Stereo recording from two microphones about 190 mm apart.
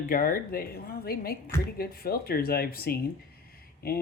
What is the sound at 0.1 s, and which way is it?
Speech, 50° left (ahead or behind).